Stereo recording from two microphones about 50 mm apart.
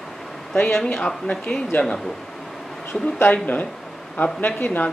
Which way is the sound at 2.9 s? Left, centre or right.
Left.